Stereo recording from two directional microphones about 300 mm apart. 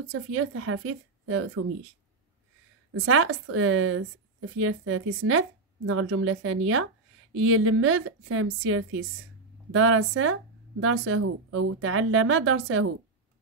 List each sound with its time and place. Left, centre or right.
0.1 s a woman's voice: right
2.9 s a woman's voice: right